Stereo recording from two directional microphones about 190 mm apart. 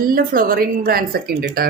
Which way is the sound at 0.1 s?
50° right (ahead or behind).